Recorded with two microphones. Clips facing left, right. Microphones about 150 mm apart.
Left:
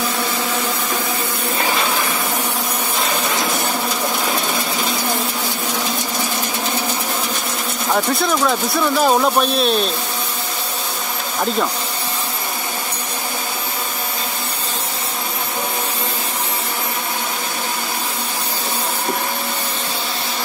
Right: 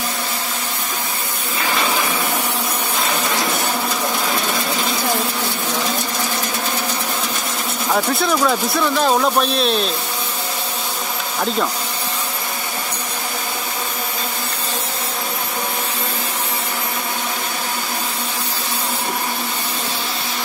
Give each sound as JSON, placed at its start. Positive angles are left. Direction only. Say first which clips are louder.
{"t": 7.9, "sound": "speech", "louder": "even", "side_deg": 0}